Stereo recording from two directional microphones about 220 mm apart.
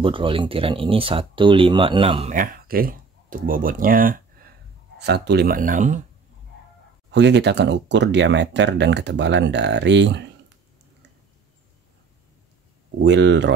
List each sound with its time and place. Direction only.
0.0 s speech: 25° right (ahead or behind)
2.3 s speech: 40° right (ahead or behind)
7.1 s speech: 50° right (ahead or behind)
13.0 s speech: 55° right (ahead or behind)